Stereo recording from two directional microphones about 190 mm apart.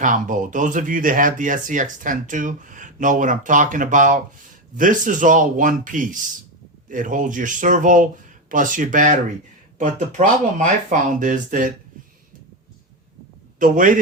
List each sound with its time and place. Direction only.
0.0 s speech: 45° right (ahead or behind)
13.6 s speech: 45° right (ahead or behind)